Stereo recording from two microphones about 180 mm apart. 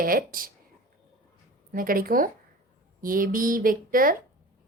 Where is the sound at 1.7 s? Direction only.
50° right (ahead or behind).